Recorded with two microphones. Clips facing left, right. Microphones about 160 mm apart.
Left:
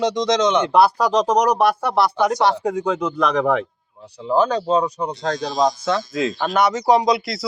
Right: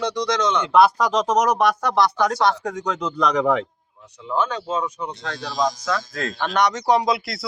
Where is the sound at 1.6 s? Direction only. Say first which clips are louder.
Left 1 dB; 10° left (ahead or behind).